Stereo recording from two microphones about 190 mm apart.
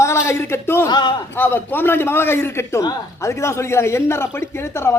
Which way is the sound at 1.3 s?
10° left (ahead or behind).